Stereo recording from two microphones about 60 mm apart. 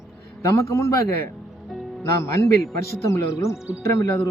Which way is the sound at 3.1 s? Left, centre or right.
Left.